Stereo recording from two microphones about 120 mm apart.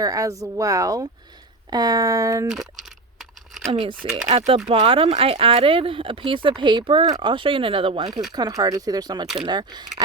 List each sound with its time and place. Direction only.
0.0 s a woman's voice: 30° right (ahead or behind)
3.7 s speech: 45° right (ahead or behind)
4.3 s speech: 60° right (ahead or behind); by 9.2 s 35° right (ahead or behind)
9.2 s speech: 5° right (ahead or behind)
9.5 s speech: 35° right (ahead or behind)